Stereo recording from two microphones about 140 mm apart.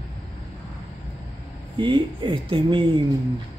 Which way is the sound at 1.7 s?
35° right (ahead or behind).